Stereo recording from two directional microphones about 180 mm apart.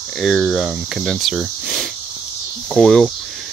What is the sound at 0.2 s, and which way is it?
Speech, centre (ahead or behind).